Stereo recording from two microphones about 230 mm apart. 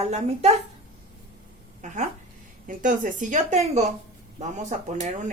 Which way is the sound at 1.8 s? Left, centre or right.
Right.